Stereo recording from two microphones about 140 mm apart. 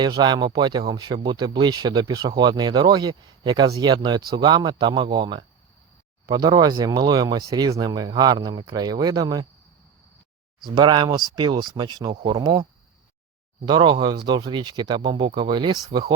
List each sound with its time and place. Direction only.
0.0 s speech: 30° right (ahead or behind)
10.6 s speech: 30° right (ahead or behind)
13.7 s speech: 35° right (ahead or behind)